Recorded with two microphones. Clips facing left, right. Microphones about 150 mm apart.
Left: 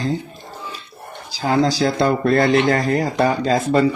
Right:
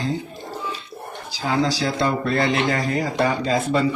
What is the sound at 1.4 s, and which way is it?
Speech, 45° left (ahead or behind).